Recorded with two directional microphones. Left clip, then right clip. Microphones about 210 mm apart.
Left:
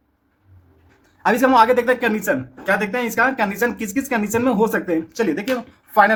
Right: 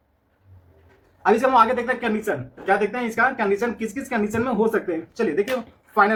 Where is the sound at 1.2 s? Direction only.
40° left (ahead or behind).